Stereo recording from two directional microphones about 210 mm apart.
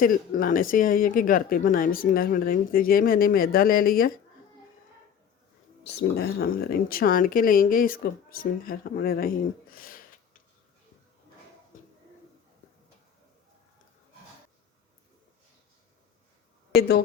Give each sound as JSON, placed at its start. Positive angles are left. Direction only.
{"t": 0.0, "sound": "speech", "side_deg": 40}
{"t": 5.8, "sound": "speech", "side_deg": 50}